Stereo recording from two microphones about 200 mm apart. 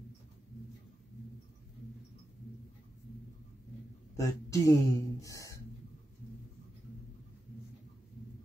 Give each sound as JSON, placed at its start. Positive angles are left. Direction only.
{"t": 4.2, "sound": "speech", "side_deg": 15}